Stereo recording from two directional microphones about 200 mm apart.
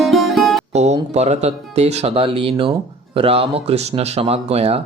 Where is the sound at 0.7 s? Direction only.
35° right (ahead or behind).